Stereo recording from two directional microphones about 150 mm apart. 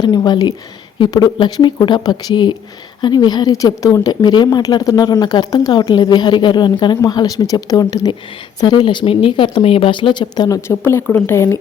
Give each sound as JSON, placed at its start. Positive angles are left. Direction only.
{"t": 0.0, "sound": "a woman's voice", "side_deg": 25}